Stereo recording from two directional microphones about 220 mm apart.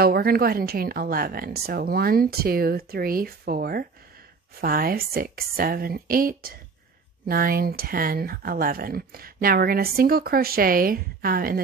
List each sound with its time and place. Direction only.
0.0 s speech: 45° right (ahead or behind)